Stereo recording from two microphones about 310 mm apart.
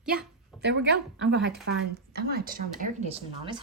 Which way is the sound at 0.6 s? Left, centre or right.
Right.